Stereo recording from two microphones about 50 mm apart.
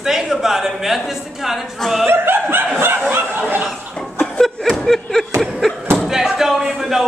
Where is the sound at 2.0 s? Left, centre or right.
Right.